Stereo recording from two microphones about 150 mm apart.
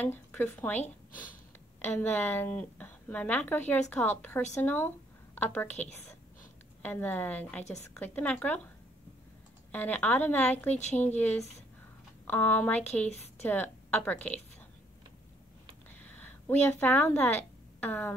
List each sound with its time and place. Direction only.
0.0 s a woman's voice: 10° left (ahead or behind)
1.8 s a woman's voice: 15° left (ahead or behind)
9.7 s a woman's voice: 10° left (ahead or behind)
10.8 s a woman's voice: 50° left (ahead or behind)
12.3 s a woman's voice: 10° left (ahead or behind)
16.0 s speech: 10° left (ahead or behind)